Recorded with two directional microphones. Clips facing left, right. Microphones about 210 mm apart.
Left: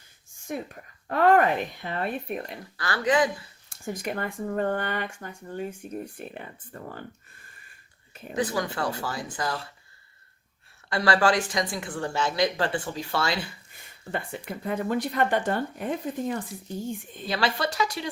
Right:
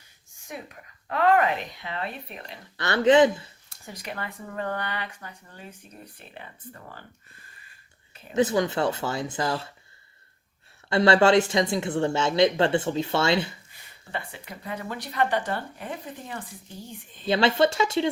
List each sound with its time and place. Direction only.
0.5 s speech: 50° left (ahead or behind)
2.7 s speech: 25° right (ahead or behind)
3.7 s speech: 50° left (ahead or behind)
8.3 s speech: 20° right (ahead or behind)
10.8 s speech: 25° right (ahead or behind)
14.1 s speech: 50° left (ahead or behind)
17.2 s speech: 25° right (ahead or behind)